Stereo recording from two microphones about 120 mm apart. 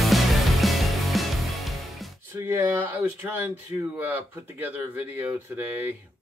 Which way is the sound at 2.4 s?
20° right (ahead or behind).